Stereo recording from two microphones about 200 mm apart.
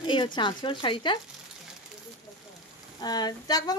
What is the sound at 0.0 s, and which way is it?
A woman's voice, 25° left (ahead or behind).